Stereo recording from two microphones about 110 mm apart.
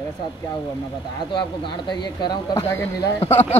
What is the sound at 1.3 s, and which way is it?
Speech, 45° left (ahead or behind).